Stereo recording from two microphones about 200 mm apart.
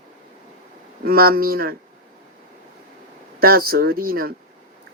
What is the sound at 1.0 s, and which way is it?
Speech, 45° right (ahead or behind).